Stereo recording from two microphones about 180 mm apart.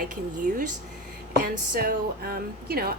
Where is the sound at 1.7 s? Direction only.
55° right (ahead or behind).